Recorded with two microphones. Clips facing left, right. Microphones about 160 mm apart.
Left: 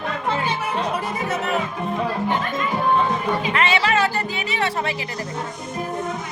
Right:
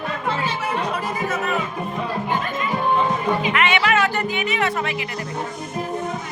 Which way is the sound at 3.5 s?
35° left (ahead or behind).